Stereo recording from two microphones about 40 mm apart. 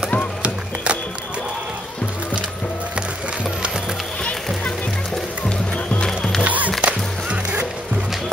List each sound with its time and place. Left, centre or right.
6.0 s music: centre
6.4 s music: right
6.8 s music: right